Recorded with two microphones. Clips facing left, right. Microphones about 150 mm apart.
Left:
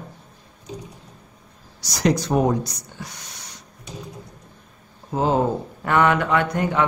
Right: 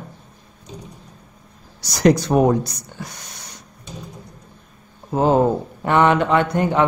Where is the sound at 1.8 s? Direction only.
55° right (ahead or behind).